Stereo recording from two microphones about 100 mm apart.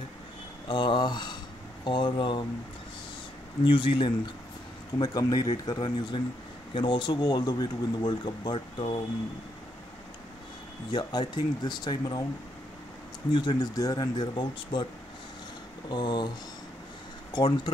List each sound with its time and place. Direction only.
0.7 s a sound: 55° left (ahead or behind)
1.9 s speech: 55° left (ahead or behind)
3.6 s speech: 55° left (ahead or behind)
4.9 s speech: 40° left (ahead or behind); by 9.0 s 60° left (ahead or behind)
10.9 s speech: 50° left (ahead or behind)
13.3 s speech: 50° left (ahead or behind)
15.9 s speech: 45° left (ahead or behind)
17.3 s speech: 50° left (ahead or behind)